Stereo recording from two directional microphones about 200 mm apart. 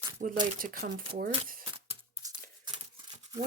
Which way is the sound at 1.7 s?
25° right (ahead or behind).